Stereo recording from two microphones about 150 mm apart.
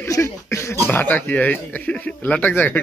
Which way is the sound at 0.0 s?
20° left (ahead or behind).